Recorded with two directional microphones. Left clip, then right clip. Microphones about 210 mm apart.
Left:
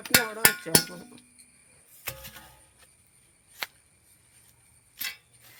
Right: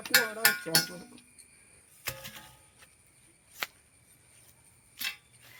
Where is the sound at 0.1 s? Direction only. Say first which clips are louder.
Left 2 dB; 50° left (ahead or behind).